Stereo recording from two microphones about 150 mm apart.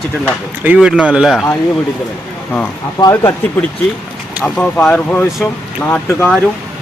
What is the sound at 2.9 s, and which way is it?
Speech, 25° left (ahead or behind).